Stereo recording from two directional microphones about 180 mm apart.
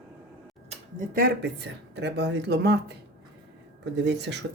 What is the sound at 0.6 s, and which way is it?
Speech, 45° right (ahead or behind).